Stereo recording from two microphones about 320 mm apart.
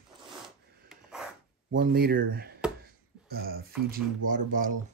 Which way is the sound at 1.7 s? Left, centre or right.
Right.